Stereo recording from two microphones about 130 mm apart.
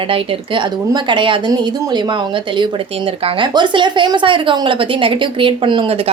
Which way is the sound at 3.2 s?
40° right (ahead or behind).